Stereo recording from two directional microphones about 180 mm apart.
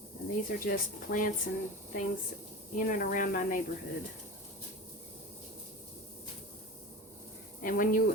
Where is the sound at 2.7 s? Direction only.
50° left (ahead or behind).